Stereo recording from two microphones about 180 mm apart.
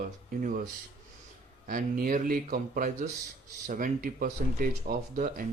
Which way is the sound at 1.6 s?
50° right (ahead or behind).